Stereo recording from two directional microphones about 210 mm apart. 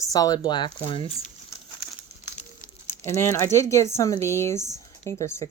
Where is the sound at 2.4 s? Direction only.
35° left (ahead or behind).